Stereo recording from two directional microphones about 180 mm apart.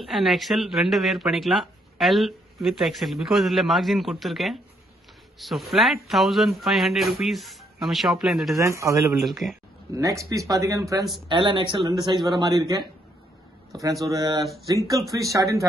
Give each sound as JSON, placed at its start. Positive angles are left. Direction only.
{"t": 0.0, "sound": "speech", "side_deg": 0}
{"t": 8.5, "sound": "speech", "side_deg": -15}
{"t": 9.2, "sound": "speech", "side_deg": 0}
{"t": 9.9, "sound": "speech", "side_deg": -20}
{"t": 14.4, "sound": "speech", "side_deg": 0}
{"t": 14.7, "sound": "speech", "side_deg": -20}